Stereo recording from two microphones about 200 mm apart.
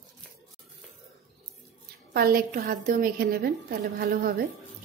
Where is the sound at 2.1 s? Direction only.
50° right (ahead or behind).